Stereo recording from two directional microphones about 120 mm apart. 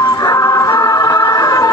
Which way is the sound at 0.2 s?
30° left (ahead or behind).